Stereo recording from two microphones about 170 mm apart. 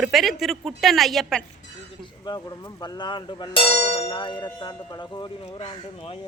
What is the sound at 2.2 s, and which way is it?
Bell, 25° left (ahead or behind).